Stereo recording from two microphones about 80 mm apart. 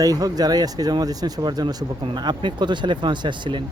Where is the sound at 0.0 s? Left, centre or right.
Right.